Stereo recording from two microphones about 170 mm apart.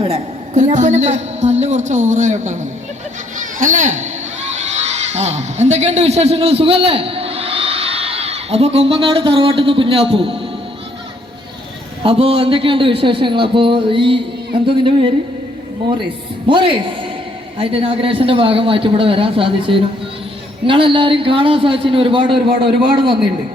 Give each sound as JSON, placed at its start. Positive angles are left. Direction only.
{"t": 0.0, "sound": "a woman's voice", "side_deg": -40}
{"t": 12.0, "sound": "a man's voice", "side_deg": -35}
{"t": 16.5, "sound": "a woman's voice", "side_deg": -30}